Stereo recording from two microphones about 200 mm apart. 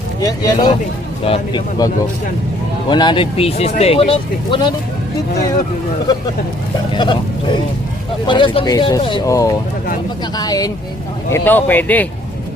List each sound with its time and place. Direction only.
0.2 s speech: 20° left (ahead or behind)
2.9 s speech: 25° left (ahead or behind)
6.9 s speech: 25° left (ahead or behind); by 12.0 s 10° left (ahead or behind)